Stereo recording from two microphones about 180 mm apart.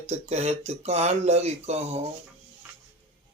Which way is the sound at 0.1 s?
35° right (ahead or behind).